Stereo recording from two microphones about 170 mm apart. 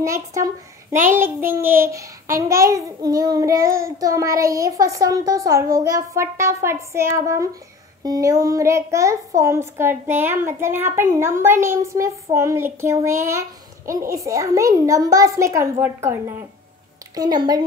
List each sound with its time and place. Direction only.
0.0 s speech: 20° right (ahead or behind)
1.1 s child singing: 15° right (ahead or behind)
5.8 s a woman's voice: 20° right (ahead or behind)
13.8 s child singing: 20° right (ahead or behind)
15.8 s a woman's voice: 15° right (ahead or behind)
17.1 s child singing: 25° right (ahead or behind)